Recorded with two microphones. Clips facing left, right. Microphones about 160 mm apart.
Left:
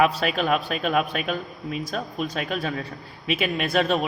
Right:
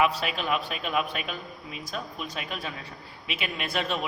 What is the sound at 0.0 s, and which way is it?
A man's voice, 45° left (ahead or behind).